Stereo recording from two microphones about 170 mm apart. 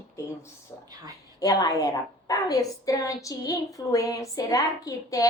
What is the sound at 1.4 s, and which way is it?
A woman's voice, 20° left (ahead or behind).